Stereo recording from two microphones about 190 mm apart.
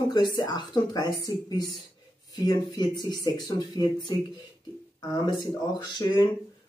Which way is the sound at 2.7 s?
20° left (ahead or behind).